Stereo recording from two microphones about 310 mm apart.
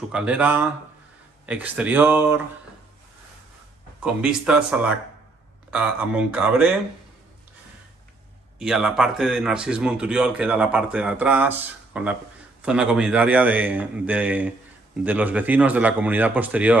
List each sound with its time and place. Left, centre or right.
0.1 s speech: centre
4.0 s speech: centre
8.5 s speech: centre